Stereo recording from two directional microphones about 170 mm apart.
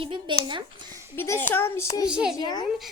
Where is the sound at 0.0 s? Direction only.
30° right (ahead or behind).